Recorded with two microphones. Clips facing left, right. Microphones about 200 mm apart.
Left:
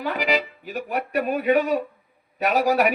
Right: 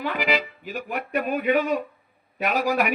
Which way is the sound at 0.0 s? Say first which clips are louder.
Left 1 dB; 40° left (ahead or behind).